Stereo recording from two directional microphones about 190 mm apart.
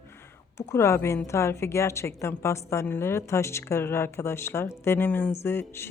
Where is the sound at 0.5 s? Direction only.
15° left (ahead or behind).